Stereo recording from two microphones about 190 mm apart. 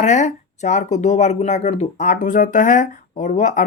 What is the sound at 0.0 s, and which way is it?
Speech, 40° left (ahead or behind).